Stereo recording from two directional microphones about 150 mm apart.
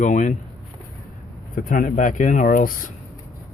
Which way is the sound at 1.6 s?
70° left (ahead or behind).